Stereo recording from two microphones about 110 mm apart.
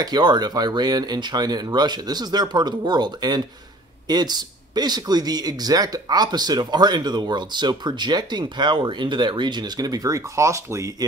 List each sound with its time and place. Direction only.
0.0 s speech: 40° right (ahead or behind)